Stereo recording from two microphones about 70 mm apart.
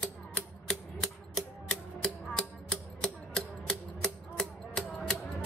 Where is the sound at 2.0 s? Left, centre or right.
Centre.